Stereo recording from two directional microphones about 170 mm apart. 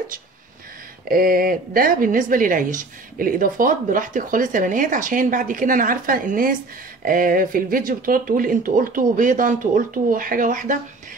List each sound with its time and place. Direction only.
1.0 s a woman's voice: 60° right (ahead or behind)